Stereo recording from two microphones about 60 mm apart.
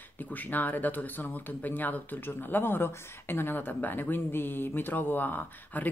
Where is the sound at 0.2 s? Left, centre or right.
Left.